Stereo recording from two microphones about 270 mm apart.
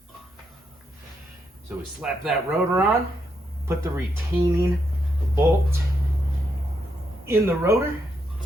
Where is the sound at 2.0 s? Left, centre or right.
Centre.